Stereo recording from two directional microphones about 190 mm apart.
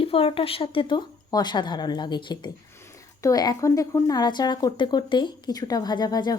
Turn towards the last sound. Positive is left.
turn(degrees=20)  # may be behind; listen again after turning